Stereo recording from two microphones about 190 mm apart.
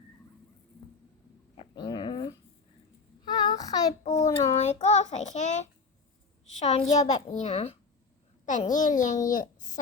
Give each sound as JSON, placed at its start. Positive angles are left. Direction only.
{"t": 1.5, "sound": "dog", "side_deg": 25}
{"t": 3.2, "sound": "child singing", "side_deg": 20}
{"t": 4.0, "sound": "a child's voice", "side_deg": 35}
{"t": 4.5, "sound": "child singing", "side_deg": 35}
{"t": 9.3, "sound": "a child's voice", "side_deg": 45}